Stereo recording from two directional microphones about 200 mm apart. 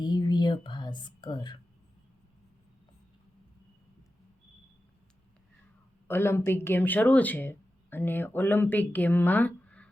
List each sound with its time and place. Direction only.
0.0 s whispering: 20° left (ahead or behind)
6.1 s speech: 10° left (ahead or behind)